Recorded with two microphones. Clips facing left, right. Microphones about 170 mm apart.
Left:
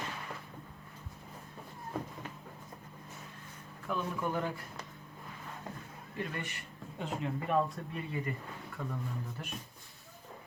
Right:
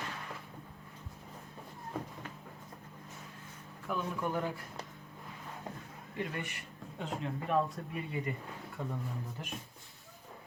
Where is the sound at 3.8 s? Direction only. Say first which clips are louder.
Even; centre (ahead or behind).